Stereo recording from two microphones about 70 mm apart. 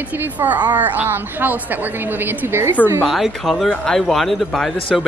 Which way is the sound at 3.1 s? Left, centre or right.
Centre.